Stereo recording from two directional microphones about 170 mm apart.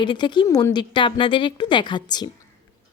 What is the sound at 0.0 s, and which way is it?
A woman's voice, 25° left (ahead or behind).